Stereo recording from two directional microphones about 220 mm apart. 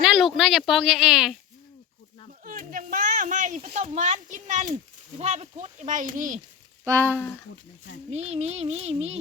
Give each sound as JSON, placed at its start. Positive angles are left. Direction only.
{"t": 0.0, "sound": "a sound", "side_deg": 0}
{"t": 0.7, "sound": "a woman's voice", "side_deg": 0}
{"t": 2.4, "sound": "speech", "side_deg": -40}
{"t": 6.8, "sound": "speech", "side_deg": -10}
{"t": 8.1, "sound": "speech", "side_deg": -30}